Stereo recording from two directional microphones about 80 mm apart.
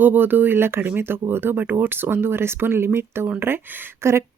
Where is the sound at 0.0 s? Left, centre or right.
Right.